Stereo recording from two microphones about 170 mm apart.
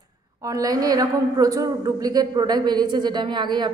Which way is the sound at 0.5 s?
20° right (ahead or behind).